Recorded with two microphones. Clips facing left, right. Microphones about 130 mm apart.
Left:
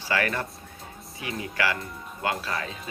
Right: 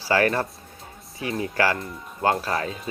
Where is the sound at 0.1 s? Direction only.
35° right (ahead or behind).